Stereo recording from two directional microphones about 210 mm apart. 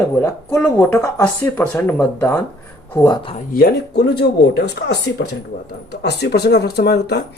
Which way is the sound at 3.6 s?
50° left (ahead or behind).